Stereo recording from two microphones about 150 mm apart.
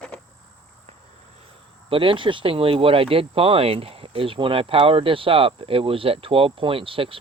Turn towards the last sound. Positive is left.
turn(degrees=-35)  # may be behind; listen again after turning